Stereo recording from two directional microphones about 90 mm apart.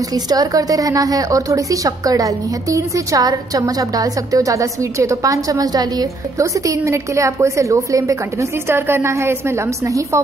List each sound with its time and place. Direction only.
0.1 s a woman's voice: 45° right (ahead or behind)